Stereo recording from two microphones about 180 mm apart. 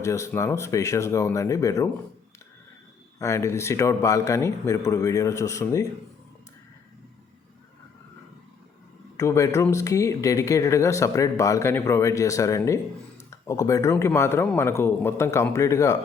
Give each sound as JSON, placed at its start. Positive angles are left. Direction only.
{"t": 0.0, "sound": "speech", "side_deg": 15}
{"t": 3.2, "sound": "speech", "side_deg": 15}
{"t": 9.1, "sound": "speech", "side_deg": 20}